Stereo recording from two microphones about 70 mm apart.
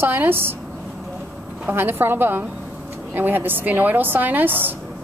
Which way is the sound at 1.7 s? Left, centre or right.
Right.